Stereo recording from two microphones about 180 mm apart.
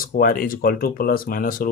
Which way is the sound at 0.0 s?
50° left (ahead or behind).